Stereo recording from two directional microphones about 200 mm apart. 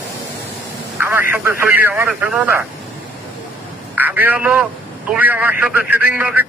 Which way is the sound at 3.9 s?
10° right (ahead or behind).